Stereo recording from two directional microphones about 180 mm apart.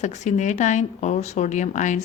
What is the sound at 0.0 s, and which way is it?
A woman's voice, 40° left (ahead or behind).